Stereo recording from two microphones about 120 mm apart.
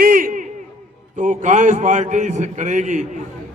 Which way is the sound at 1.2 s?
90° right.